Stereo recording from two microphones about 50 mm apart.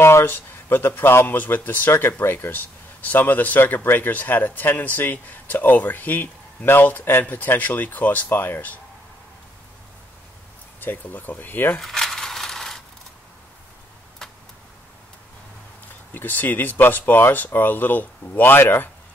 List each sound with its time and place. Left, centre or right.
0.0 s speech: left
1.2 s a man's voice: left
10.8 s a man's voice: left
11.8 s coin: centre
16.1 s a man's voice: left